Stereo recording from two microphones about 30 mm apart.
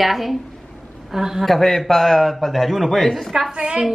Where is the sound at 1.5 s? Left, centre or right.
Centre.